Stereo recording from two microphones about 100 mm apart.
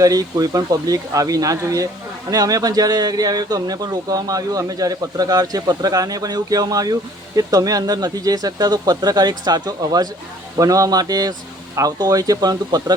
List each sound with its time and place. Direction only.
0.0 s speech: 35° right (ahead or behind)